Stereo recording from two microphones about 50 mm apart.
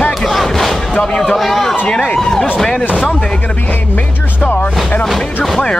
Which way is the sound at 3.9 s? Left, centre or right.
Left.